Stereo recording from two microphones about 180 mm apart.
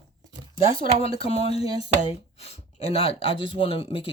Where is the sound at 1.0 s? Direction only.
35° left (ahead or behind).